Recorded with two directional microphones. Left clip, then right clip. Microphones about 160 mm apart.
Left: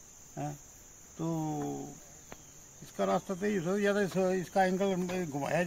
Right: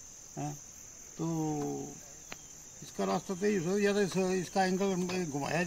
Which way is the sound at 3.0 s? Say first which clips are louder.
Left 2 dB; 5° right (ahead or behind).